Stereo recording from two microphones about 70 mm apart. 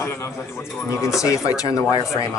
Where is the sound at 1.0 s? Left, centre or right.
Left.